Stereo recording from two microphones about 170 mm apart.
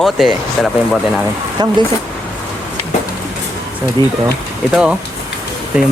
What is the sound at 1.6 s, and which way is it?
Speech, 25° right (ahead or behind).